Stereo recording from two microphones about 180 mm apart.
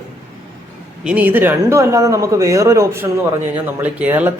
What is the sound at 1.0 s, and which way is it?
Speech, 5° right (ahead or behind).